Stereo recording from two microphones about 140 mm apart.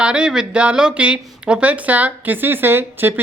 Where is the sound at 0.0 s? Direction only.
10° right (ahead or behind).